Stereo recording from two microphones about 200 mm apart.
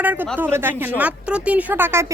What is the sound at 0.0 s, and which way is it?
A woman's voice, 10° right (ahead or behind).